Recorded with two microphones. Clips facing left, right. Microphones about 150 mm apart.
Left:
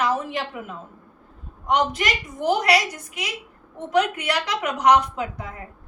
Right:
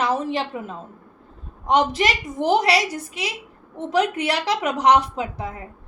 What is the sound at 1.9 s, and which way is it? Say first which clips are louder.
A woman's voice: right 4 dB; 30° right (ahead or behind).